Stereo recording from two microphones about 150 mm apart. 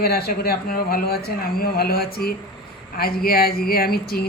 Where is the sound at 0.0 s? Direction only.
90° left.